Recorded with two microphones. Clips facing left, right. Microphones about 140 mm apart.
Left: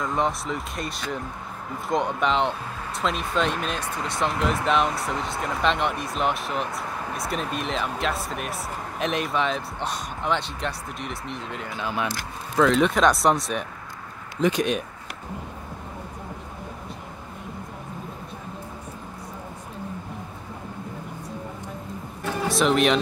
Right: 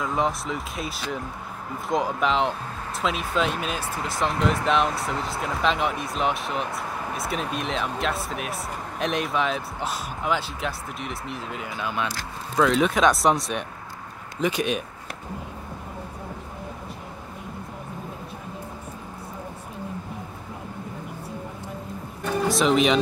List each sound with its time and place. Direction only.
0.0 s speech: centre (ahead or behind)
12.0 s speech: 20° left (ahead or behind)
12.5 s speech: 5° right (ahead or behind)
22.2 s music: centre (ahead or behind)